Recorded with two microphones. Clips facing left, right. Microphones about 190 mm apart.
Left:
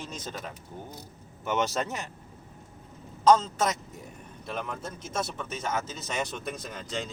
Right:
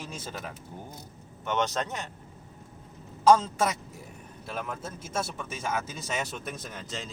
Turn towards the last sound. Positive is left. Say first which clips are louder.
# left 3 dB
turn(degrees=0)  # may be behind; listen again after turning